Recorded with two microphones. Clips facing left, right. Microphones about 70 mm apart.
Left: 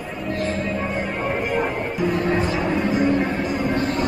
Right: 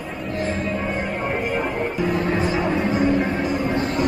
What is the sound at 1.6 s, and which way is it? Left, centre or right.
Music, centre.